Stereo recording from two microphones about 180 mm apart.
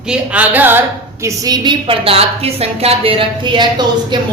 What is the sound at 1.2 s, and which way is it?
A woman's voice, 20° right (ahead or behind).